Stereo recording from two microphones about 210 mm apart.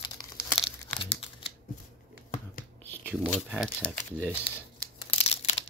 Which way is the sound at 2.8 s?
10° left (ahead or behind).